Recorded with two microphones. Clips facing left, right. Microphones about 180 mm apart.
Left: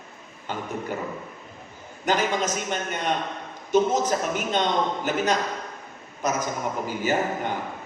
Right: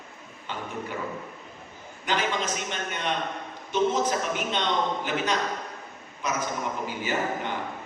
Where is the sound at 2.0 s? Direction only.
45° left (ahead or behind).